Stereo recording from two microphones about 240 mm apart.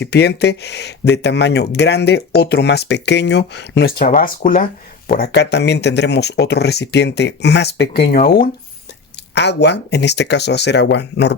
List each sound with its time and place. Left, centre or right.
0.0 s speech: left